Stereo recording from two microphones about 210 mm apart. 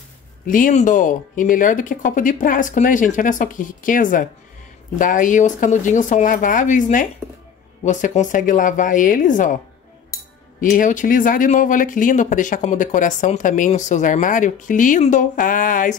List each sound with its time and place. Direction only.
0.5 s speech: 40° left (ahead or behind)
10.6 s speech: 40° left (ahead or behind)